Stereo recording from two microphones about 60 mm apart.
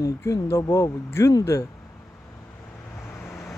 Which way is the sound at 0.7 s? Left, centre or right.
Left.